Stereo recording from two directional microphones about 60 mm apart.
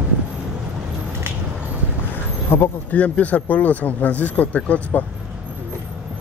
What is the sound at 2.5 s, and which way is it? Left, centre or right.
Speech, left.